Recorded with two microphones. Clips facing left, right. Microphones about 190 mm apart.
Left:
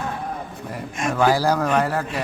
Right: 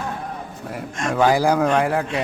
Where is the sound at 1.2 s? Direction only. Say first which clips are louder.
Right 2 dB; 15° right (ahead or behind).